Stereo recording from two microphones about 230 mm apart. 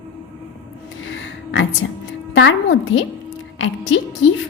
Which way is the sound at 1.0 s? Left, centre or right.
Left.